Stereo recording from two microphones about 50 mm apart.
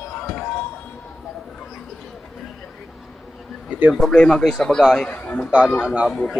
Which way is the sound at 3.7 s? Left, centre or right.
Right.